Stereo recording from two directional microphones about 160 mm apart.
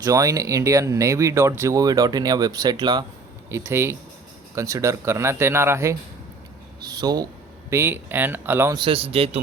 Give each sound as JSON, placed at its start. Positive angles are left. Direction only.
{"t": 0.0, "sound": "speech", "side_deg": -20}
{"t": 3.5, "sound": "speech", "side_deg": -15}
{"t": 7.7, "sound": "speech", "side_deg": -15}
{"t": 8.7, "sound": "a man's voice", "side_deg": -35}